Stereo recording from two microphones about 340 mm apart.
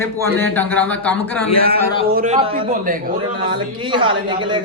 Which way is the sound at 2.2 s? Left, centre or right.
Centre.